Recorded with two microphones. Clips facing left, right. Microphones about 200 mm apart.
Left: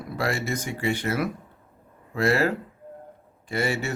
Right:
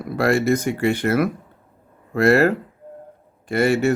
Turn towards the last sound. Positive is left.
turn(degrees=-55)  # may be behind; listen again after turning